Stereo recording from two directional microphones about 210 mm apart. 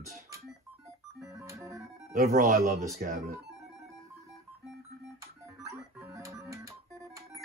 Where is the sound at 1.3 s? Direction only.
15° right (ahead or behind).